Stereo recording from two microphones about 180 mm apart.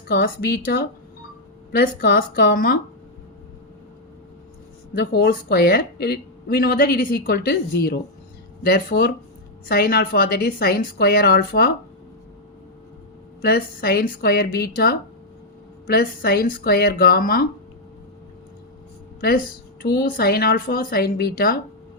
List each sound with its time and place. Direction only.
0.2 s speech: 60° left (ahead or behind)
4.9 s speech: 65° left (ahead or behind)
8.6 s speech: 60° left (ahead or behind)
13.4 s speech: 60° left (ahead or behind)
19.8 s speech: 60° left (ahead or behind)